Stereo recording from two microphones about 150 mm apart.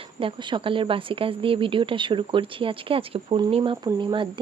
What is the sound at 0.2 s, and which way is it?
Speech, 35° right (ahead or behind).